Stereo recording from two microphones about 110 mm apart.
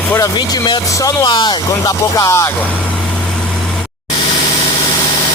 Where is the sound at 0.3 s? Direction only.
45° left (ahead or behind).